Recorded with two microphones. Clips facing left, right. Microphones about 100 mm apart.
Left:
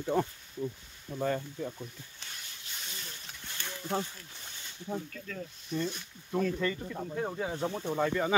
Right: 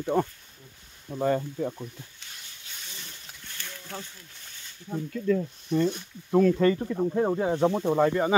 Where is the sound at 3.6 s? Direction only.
25° left (ahead or behind).